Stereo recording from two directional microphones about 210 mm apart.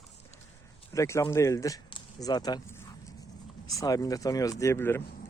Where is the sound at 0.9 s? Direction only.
15° left (ahead or behind).